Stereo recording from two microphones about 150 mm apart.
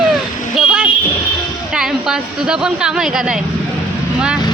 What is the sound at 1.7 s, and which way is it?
A woman's voice, 5° right (ahead or behind).